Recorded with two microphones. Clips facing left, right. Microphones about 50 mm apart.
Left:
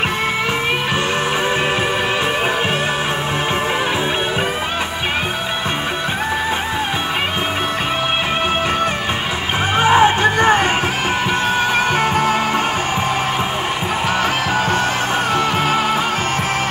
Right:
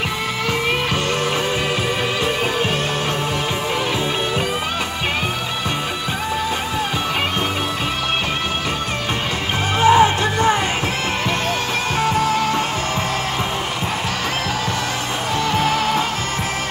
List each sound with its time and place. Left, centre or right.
9.8 s music: left
12.0 s music: left